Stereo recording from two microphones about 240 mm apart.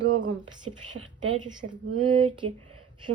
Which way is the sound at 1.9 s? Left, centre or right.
Right.